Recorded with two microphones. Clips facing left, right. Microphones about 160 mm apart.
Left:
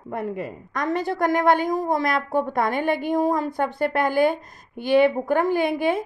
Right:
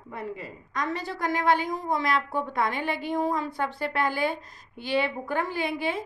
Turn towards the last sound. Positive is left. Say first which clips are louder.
# left 8 dB
turn(degrees=50)  # may be behind; listen again after turning